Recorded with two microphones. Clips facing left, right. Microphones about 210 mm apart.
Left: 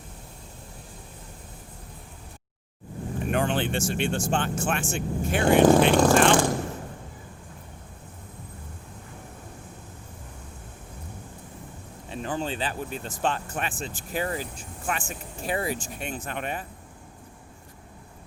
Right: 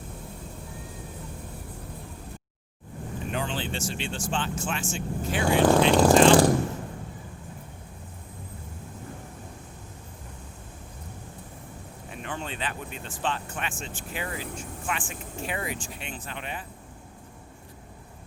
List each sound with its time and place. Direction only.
3.2 s vehicle: 55° left (ahead or behind)
4.3 s speech: 50° left (ahead or behind)
12.1 s speech: 35° left (ahead or behind); by 16.6 s 50° left (ahead or behind)